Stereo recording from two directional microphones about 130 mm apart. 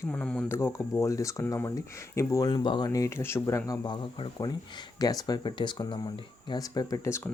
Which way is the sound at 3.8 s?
35° left (ahead or behind).